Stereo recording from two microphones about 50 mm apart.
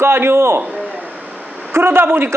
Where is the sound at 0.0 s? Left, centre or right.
Right.